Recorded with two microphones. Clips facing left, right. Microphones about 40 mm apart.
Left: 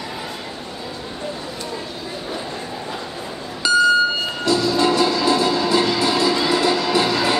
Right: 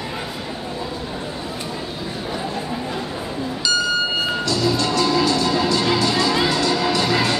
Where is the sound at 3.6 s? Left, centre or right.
Left.